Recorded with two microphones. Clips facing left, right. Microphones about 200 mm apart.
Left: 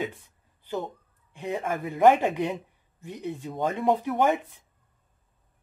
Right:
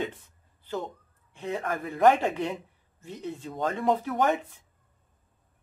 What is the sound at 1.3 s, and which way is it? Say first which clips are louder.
Speech: left 1 dB; 15° left (ahead or behind).